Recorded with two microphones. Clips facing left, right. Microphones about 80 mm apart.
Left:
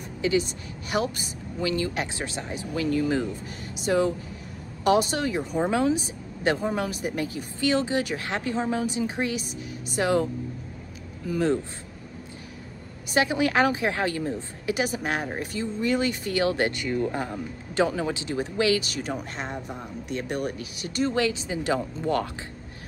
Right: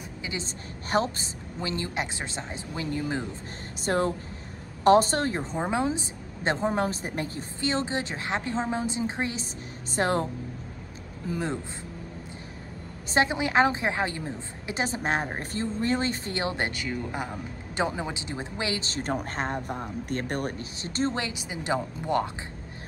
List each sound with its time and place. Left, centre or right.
0.2 s a woman's voice: right
3.8 s speech: right
5.4 s a woman's voice: right
9.8 s speech: right
11.2 s a woman's voice: centre
13.1 s a woman's voice: right
16.9 s a woman's voice: centre